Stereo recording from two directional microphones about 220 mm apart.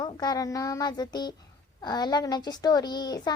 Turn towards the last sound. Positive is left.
turn(degrees=20)  # may be behind; listen again after turning